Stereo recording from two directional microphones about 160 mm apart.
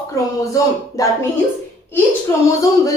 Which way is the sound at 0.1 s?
20° left (ahead or behind).